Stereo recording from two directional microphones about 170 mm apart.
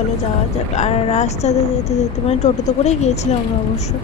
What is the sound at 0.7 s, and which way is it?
Speech, 40° left (ahead or behind).